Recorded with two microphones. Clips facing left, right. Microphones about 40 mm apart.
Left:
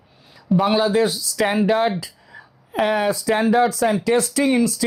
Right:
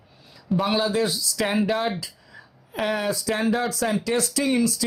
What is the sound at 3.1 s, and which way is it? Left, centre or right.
Speech, left.